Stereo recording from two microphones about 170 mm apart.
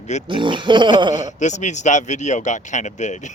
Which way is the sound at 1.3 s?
45° left (ahead or behind).